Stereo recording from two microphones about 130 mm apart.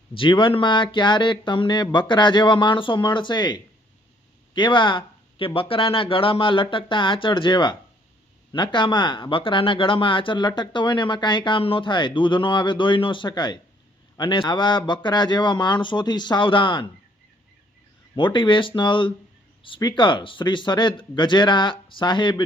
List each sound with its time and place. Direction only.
0.1 s speech: 40° left (ahead or behind)
18.1 s speech: 40° left (ahead or behind)